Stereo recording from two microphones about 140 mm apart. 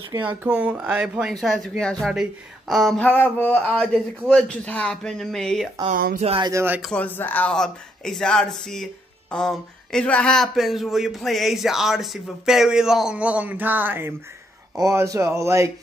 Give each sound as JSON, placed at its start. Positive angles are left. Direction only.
{"t": 0.2, "sound": "speech", "side_deg": -10}
{"t": 3.0, "sound": "speech", "side_deg": 10}
{"t": 5.9, "sound": "speech", "side_deg": -90}
{"t": 6.4, "sound": "speech", "side_deg": -20}
{"t": 6.8, "sound": "speech", "side_deg": 10}